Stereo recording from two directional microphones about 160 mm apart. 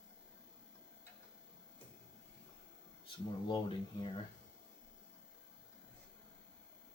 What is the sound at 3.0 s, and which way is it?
Speech, 30° left (ahead or behind).